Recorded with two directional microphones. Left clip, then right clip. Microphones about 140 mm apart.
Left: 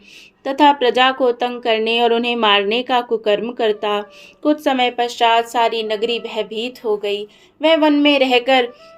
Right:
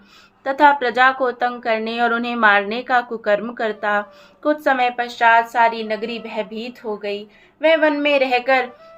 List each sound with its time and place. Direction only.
0.4 s speech: 30° left (ahead or behind)
4.6 s a woman's voice: 40° left (ahead or behind)